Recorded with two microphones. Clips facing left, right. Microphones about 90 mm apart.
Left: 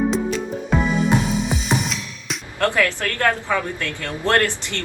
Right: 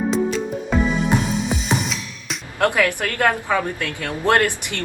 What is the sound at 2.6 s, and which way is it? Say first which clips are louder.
Speech: right 1 dB; 15° right (ahead or behind).